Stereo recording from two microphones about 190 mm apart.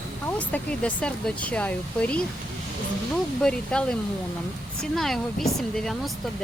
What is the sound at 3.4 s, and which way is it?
Speech, 5° left (ahead or behind).